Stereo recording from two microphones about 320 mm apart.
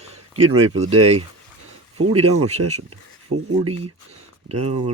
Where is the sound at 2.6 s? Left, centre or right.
Right.